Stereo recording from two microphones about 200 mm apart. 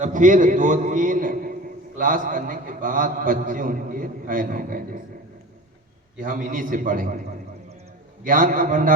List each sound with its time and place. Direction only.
0.0 s a man's voice: 40° right (ahead or behind)
6.2 s a man's voice: 40° right (ahead or behind)
8.2 s a man's voice: 40° right (ahead or behind)